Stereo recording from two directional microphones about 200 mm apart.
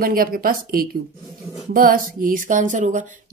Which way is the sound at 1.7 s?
45° right (ahead or behind).